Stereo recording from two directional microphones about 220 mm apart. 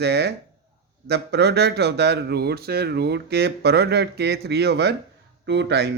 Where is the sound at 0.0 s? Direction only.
50° right (ahead or behind).